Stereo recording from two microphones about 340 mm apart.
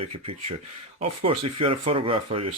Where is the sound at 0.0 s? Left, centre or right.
Centre.